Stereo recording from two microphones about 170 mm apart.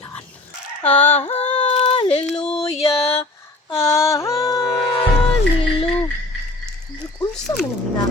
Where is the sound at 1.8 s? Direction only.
35° left (ahead or behind).